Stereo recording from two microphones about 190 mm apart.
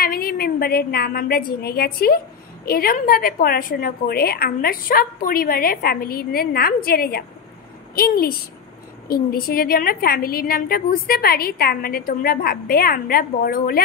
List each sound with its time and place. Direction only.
0.0 s a woman's voice: 50° left (ahead or behind)